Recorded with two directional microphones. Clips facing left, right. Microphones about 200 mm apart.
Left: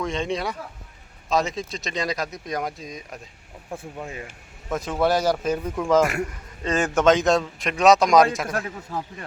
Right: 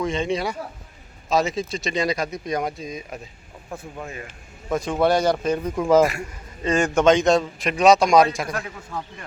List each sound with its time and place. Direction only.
0.0 s a man's voice: centre (ahead or behind)
3.7 s speech: 10° left (ahead or behind)
4.7 s a man's voice: centre (ahead or behind)
8.9 s speech: 30° left (ahead or behind)